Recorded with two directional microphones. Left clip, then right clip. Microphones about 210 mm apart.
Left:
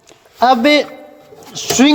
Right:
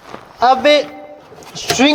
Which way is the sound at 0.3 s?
45° left (ahead or behind).